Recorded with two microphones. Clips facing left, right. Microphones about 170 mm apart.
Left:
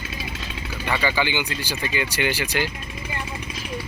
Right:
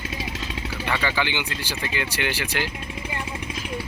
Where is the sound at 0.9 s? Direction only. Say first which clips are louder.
Left 3 dB; 5° left (ahead or behind).